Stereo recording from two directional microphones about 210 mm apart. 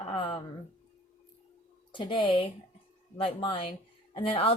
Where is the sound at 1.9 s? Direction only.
25° left (ahead or behind).